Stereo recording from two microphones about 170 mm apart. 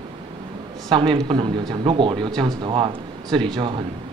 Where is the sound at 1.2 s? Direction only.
25° right (ahead or behind).